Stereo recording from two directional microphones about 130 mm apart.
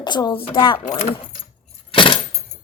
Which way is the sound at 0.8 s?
70° left (ahead or behind).